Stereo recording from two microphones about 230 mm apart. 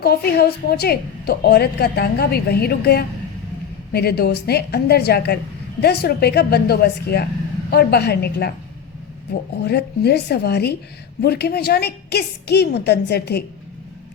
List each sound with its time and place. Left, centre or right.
0.0 s a woman's voice: left
9.6 s a woman's voice: left